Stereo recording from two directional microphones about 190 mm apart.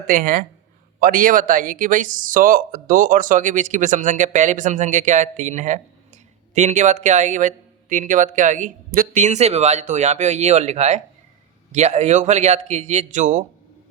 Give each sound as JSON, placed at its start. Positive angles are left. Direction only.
{"t": 0.1, "sound": "speech", "side_deg": -45}